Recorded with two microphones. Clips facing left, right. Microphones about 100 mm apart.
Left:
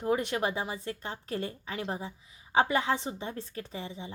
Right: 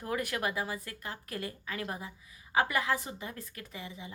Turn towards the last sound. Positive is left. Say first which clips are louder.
# left 5 dB
turn(degrees=30)  # may be behind; listen again after turning